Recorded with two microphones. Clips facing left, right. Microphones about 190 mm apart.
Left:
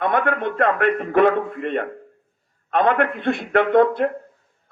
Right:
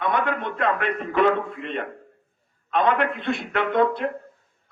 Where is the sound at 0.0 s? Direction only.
55° left (ahead or behind).